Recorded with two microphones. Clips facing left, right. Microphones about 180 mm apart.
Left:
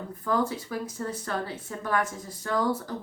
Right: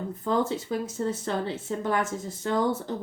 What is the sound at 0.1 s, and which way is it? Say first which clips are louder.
Speech: right 1 dB; 25° right (ahead or behind).